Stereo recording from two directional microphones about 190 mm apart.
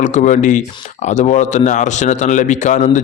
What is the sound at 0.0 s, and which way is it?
Speech, 40° left (ahead or behind).